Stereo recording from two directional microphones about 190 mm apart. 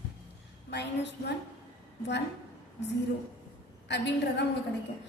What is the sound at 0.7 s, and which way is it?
Speech, 65° left (ahead or behind).